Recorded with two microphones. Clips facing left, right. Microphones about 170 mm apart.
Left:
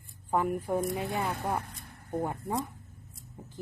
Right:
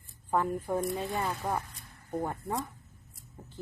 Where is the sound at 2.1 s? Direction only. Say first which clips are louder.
Left 1 dB; 15° left (ahead or behind).